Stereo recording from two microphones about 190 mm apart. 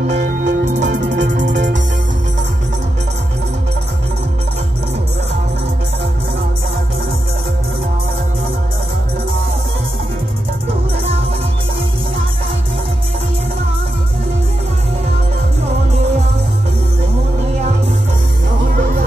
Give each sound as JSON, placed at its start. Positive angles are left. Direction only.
{"t": 0.1, "sound": "music", "side_deg": -45}
{"t": 1.5, "sound": "music", "side_deg": -70}
{"t": 18.8, "sound": "music", "side_deg": -40}